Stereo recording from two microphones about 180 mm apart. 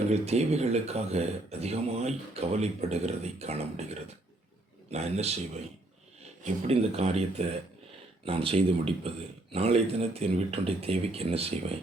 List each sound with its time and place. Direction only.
0.1 s speech: 35° right (ahead or behind)
4.9 s speech: 35° right (ahead or behind)
6.4 s speech: 35° right (ahead or behind)